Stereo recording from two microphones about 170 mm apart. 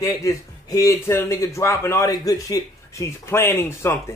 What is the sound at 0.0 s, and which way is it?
A man's voice, 20° left (ahead or behind).